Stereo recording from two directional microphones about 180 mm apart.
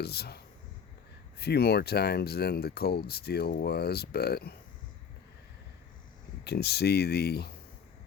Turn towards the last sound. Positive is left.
turn(degrees=65)  # may be behind; listen again after turning